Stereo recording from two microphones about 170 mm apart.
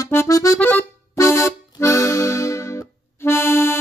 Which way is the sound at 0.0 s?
15° left (ahead or behind).